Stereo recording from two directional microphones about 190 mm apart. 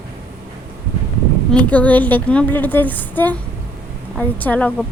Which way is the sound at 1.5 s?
10° left (ahead or behind).